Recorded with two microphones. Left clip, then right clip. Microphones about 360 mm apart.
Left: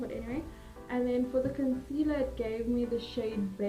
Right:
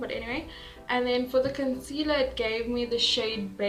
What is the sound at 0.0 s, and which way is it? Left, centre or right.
A woman's voice, right.